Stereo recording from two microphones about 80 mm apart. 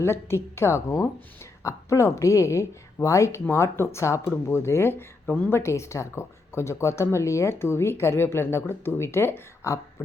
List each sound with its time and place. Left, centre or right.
0.0 s speech: left